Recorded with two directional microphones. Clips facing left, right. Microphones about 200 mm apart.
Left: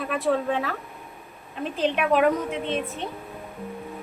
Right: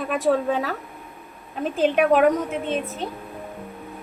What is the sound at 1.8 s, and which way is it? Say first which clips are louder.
Speech: right 4 dB; 45° right (ahead or behind).